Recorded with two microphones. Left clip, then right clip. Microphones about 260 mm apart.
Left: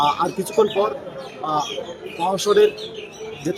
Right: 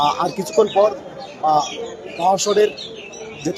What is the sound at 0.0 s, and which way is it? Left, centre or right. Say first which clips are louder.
Speech: right 1 dB; centre.